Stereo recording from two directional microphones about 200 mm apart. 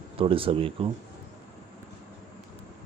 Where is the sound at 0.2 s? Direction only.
25° right (ahead or behind).